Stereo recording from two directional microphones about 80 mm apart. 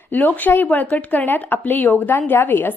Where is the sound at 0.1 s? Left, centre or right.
Left.